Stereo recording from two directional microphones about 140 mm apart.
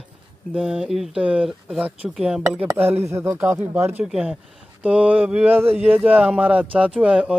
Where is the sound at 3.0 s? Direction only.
20° right (ahead or behind).